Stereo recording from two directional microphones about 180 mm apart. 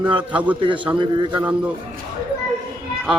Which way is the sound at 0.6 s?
30° right (ahead or behind).